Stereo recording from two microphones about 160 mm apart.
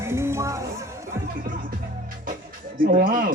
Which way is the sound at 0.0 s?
15° right (ahead or behind).